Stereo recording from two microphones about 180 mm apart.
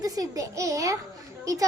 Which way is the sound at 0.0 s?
20° right (ahead or behind).